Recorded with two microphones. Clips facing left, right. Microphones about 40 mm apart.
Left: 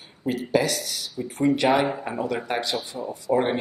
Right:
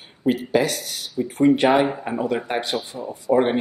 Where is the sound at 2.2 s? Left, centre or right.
Right.